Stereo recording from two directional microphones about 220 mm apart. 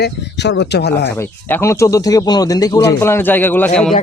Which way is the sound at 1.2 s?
10° left (ahead or behind).